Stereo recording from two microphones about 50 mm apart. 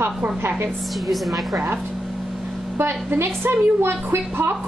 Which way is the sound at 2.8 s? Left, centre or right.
Right.